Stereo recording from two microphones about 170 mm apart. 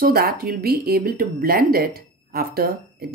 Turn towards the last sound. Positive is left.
turn(degrees=-65)  # may be behind; listen again after turning